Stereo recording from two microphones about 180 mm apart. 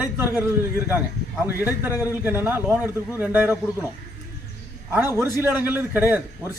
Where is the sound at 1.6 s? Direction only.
10° right (ahead or behind).